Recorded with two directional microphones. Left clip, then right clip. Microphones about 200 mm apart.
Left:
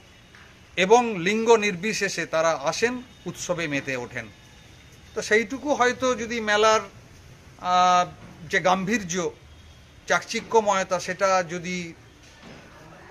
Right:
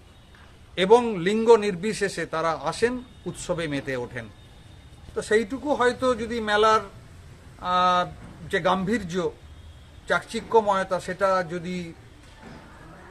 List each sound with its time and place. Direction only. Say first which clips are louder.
0.7 s a man's voice: even; centre (ahead or behind)
5.1 s a man's voice: left 1 dB; 15° left (ahead or behind)